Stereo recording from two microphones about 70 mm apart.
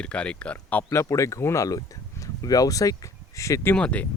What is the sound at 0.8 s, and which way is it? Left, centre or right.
Speech, left.